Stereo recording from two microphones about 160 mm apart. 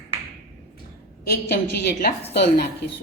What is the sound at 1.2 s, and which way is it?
Speech, 85° left.